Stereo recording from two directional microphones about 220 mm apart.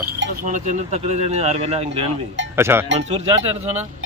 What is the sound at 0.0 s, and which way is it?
Speech, 45° right (ahead or behind).